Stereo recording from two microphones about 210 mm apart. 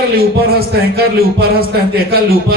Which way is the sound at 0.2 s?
45° right (ahead or behind).